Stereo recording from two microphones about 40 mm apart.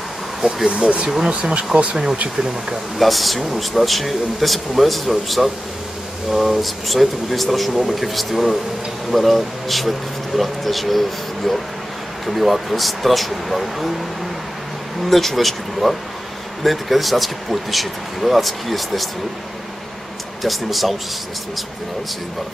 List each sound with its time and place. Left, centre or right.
0.7 s speech: right
3.0 s speech: centre
15.0 s speech: centre
20.4 s speech: centre